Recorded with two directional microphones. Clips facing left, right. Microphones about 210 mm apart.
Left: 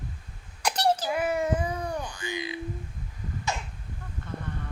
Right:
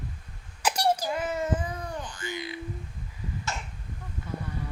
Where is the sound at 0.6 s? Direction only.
5° right (ahead or behind).